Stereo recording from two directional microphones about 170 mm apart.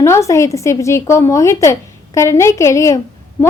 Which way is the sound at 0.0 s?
15° left (ahead or behind).